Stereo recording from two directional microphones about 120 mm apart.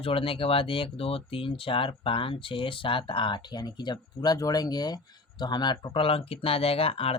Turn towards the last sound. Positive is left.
turn(degrees=50)  # may be behind; listen again after turning